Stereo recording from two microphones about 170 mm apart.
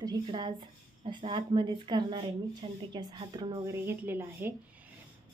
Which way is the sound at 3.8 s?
10° right (ahead or behind).